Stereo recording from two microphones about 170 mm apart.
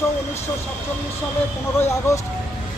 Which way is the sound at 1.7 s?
15° left (ahead or behind).